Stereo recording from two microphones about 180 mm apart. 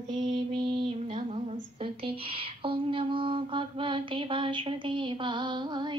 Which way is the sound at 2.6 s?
30° right (ahead or behind).